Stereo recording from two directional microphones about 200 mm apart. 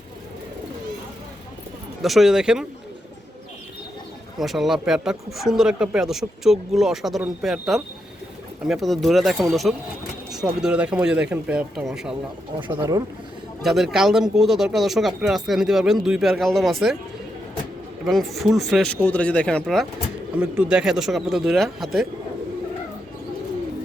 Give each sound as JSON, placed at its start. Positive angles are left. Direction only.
{"t": 2.0, "sound": "speech", "side_deg": 0}
{"t": 4.4, "sound": "speech", "side_deg": 0}
{"t": 12.5, "sound": "speech", "side_deg": -25}
{"t": 13.6, "sound": "speech", "side_deg": 0}
{"t": 18.0, "sound": "speech", "side_deg": 0}